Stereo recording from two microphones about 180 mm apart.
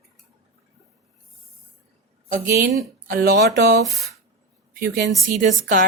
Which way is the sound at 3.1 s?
60° right (ahead or behind).